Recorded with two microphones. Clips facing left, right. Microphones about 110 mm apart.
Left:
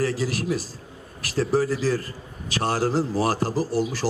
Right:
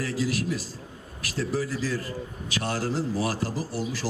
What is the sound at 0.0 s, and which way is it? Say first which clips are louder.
A man's voice: left 3 dB; 40° left (ahead or behind).